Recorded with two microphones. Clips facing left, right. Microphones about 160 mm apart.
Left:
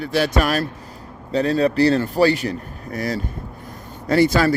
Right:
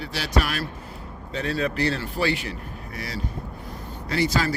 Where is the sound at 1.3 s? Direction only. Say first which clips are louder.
Left 8 dB; 35° left (ahead or behind); by 4.5 s 55° left (ahead or behind).